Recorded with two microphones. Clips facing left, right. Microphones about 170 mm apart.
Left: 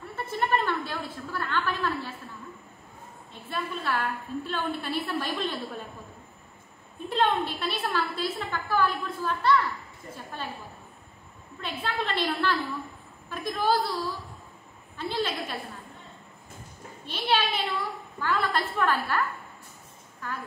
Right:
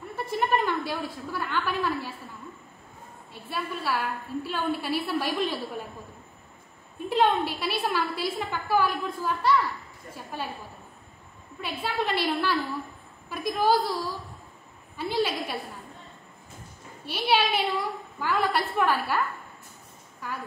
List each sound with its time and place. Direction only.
0.1 s a sound: 10° right (ahead or behind)
3.4 s a woman's voice: 10° right (ahead or behind)
7.1 s a woman's voice: 10° right (ahead or behind)
11.6 s a woman's voice: 10° right (ahead or behind)
15.0 s a woman's voice: 10° right (ahead or behind)
17.0 s a woman's voice: 10° right (ahead or behind)
20.2 s a woman's voice: 10° right (ahead or behind)